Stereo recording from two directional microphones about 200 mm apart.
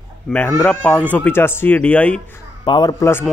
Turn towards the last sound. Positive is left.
turn(degrees=15)  # may be behind; listen again after turning